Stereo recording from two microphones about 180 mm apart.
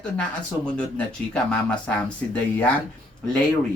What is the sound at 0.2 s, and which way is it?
Speech, 5° left (ahead or behind).